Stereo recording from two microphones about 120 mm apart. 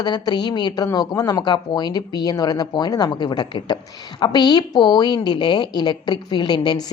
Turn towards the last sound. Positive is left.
turn(degrees=40)  # may be behind; listen again after turning